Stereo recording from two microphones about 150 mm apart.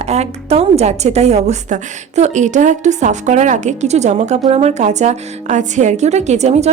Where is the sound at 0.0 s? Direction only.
45° right (ahead or behind).